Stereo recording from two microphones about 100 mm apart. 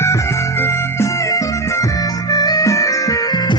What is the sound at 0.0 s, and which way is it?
Music, 30° left (ahead or behind).